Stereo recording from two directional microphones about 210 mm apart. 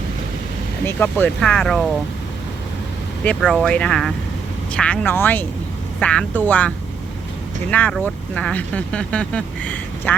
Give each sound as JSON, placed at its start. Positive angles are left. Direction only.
{"t": 0.9, "sound": "speech", "side_deg": 10}
{"t": 3.2, "sound": "speech", "side_deg": 0}